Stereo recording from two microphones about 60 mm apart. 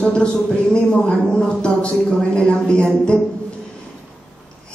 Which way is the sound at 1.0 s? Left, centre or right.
Centre.